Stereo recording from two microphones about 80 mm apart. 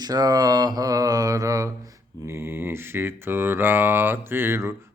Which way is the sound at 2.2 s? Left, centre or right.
Right.